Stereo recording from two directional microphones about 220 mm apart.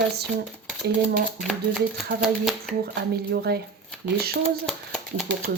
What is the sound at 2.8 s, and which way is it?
Speech, 45° right (ahead or behind).